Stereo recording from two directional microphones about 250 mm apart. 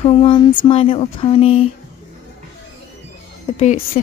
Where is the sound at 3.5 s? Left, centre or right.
Left.